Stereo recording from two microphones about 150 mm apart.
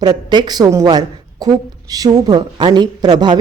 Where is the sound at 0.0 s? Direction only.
30° right (ahead or behind).